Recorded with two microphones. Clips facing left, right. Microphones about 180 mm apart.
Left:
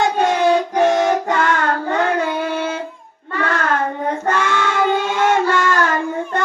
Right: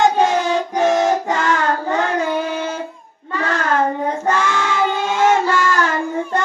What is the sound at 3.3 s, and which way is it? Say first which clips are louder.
Child singing: right 1 dB; 60° left (ahead or behind).